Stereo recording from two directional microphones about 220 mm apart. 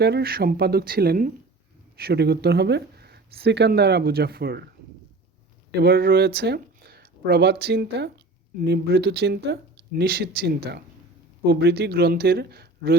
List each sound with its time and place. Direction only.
0.0 s speech: 45° right (ahead or behind)
5.8 s speech: 45° right (ahead or behind)